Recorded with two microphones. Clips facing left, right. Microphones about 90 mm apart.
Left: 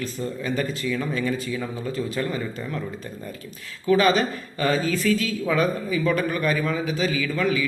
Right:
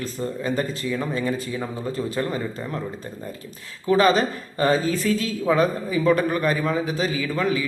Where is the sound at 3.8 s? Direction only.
35° right (ahead or behind).